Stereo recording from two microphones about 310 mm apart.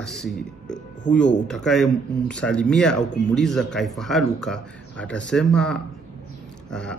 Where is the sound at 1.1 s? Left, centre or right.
Left.